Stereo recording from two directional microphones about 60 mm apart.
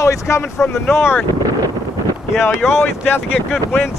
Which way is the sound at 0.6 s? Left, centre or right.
Left.